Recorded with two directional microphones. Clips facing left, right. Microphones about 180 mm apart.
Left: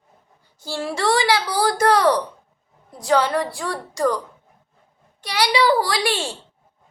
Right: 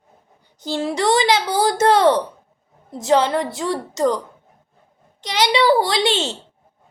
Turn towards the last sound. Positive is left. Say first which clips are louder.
# right 3 dB
turn(degrees=-20)  # may be behind; listen again after turning